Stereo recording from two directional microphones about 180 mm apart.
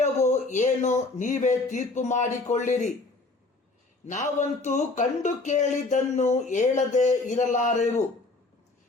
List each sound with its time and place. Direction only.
0.0 s speech: 40° left (ahead or behind)
4.0 s speech: 45° left (ahead or behind)